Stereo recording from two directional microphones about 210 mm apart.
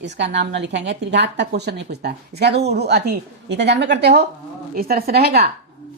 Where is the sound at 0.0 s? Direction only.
55° right (ahead or behind).